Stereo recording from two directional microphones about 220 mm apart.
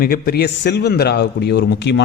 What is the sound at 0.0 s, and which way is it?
A man's voice, 45° left (ahead or behind).